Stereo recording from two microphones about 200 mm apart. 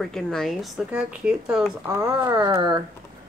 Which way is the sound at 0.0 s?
Centre (ahead or behind).